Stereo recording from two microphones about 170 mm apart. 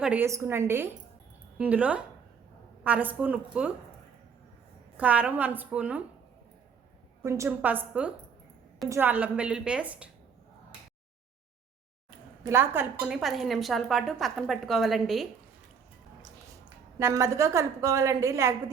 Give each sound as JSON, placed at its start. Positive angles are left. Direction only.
{"t": 0.0, "sound": "a woman's voice", "side_deg": -10}
{"t": 4.9, "sound": "a woman's voice", "side_deg": -10}
{"t": 7.2, "sound": "a woman's voice", "side_deg": -20}
{"t": 12.5, "sound": "a woman's voice", "side_deg": -10}
{"t": 13.1, "sound": "a woman's voice", "side_deg": 0}
{"t": 17.0, "sound": "a woman's voice", "side_deg": -15}